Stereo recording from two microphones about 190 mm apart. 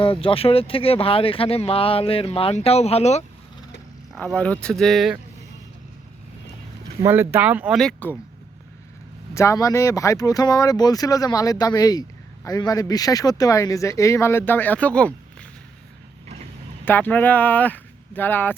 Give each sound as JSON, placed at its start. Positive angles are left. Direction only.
{"t": 0.0, "sound": "speech", "side_deg": 30}
{"t": 4.1, "sound": "speech", "side_deg": 5}
{"t": 7.0, "sound": "speech", "side_deg": -10}
{"t": 9.3, "sound": "speech", "side_deg": 15}
{"t": 16.8, "sound": "speech", "side_deg": 10}